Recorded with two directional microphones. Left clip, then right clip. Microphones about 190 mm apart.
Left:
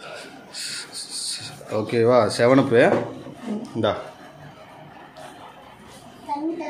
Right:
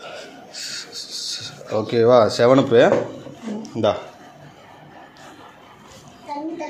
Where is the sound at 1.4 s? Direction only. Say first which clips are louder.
Right 4 dB; 10° right (ahead or behind).